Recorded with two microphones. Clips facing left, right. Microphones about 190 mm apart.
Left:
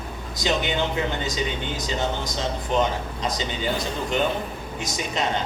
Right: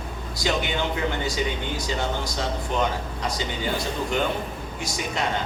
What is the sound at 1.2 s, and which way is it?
A man's voice, 20° left (ahead or behind).